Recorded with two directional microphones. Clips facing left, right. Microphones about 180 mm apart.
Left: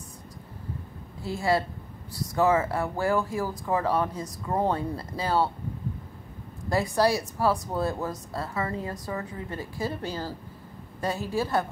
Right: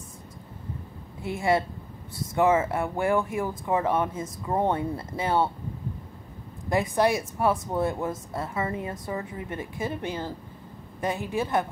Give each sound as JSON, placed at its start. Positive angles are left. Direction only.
{"t": 1.2, "sound": "speech", "side_deg": -20}
{"t": 6.7, "sound": "speech", "side_deg": -20}